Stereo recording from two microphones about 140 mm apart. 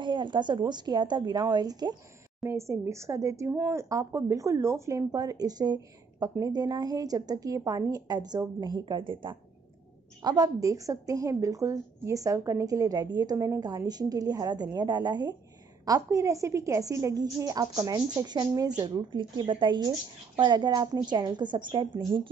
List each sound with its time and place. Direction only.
0.0 s a woman's voice: 35° right (ahead or behind)
10.2 s a woman's voice: 25° right (ahead or behind)